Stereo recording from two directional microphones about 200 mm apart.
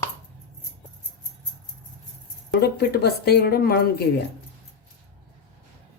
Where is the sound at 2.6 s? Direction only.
55° left (ahead or behind).